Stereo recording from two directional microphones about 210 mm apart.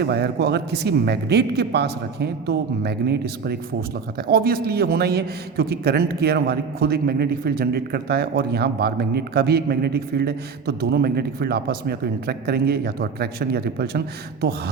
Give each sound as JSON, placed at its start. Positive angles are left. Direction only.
{"t": 0.0, "sound": "a man's voice", "side_deg": -50}